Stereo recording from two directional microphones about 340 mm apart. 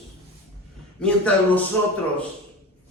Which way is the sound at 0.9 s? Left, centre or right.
Centre.